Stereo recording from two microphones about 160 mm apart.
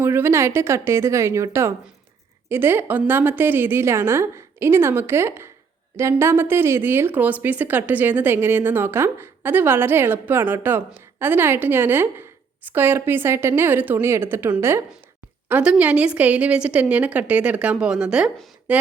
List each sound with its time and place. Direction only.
0.0 s a woman's voice: 15° right (ahead or behind)